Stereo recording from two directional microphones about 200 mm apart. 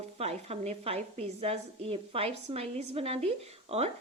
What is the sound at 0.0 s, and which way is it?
A woman's voice, 30° right (ahead or behind).